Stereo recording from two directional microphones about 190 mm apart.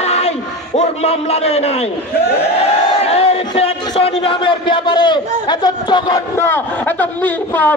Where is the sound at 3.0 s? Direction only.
30° left (ahead or behind).